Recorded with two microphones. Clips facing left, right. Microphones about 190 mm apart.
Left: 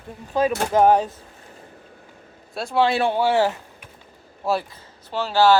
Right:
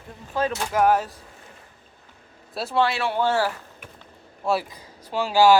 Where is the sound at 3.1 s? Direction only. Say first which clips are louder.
Left 3 dB; 15° left (ahead or behind).